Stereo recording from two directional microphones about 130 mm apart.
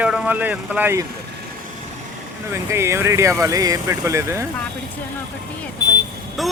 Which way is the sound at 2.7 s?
20° right (ahead or behind).